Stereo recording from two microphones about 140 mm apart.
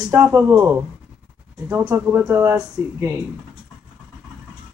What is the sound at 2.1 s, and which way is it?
Speech, 15° right (ahead or behind).